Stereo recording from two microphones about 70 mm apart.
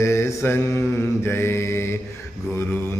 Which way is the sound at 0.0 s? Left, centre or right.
Left.